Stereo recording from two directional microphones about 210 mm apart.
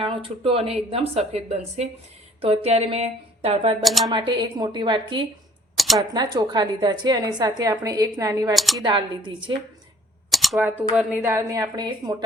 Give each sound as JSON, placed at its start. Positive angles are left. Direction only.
{"t": 0.0, "sound": "a woman's voice", "side_deg": -25}
{"t": 3.8, "sound": "speech", "side_deg": 0}
{"t": 4.1, "sound": "a woman's voice", "side_deg": -20}
{"t": 5.7, "sound": "a sound", "side_deg": 0}
{"t": 6.0, "sound": "a woman's voice", "side_deg": -20}
{"t": 8.5, "sound": "speech", "side_deg": 0}
{"t": 8.8, "sound": "a woman's voice", "side_deg": -20}
{"t": 10.3, "sound": "a woman's voice", "side_deg": 0}